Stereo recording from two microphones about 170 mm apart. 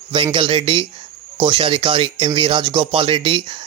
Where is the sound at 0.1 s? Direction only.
30° right (ahead or behind).